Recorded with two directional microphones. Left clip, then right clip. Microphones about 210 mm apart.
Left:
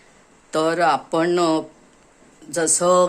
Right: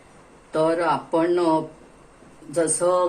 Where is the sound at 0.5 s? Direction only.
60° left (ahead or behind).